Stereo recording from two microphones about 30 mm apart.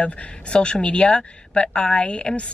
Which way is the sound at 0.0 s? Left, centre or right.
Left.